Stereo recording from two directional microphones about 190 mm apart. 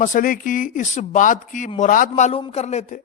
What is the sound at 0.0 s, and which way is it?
A man's voice, 45° left (ahead or behind).